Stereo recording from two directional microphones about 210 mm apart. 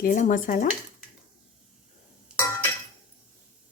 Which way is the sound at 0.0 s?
40° left (ahead or behind).